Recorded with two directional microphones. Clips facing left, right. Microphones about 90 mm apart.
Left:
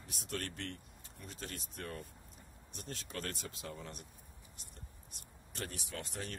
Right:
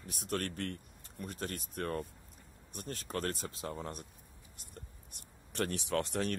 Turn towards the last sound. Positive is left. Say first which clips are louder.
# right 11 dB
turn(degrees=-65)  # may be behind; listen again after turning